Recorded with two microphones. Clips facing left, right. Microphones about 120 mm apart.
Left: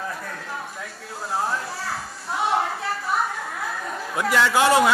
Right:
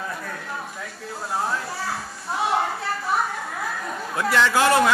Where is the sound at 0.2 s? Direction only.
Centre (ahead or behind).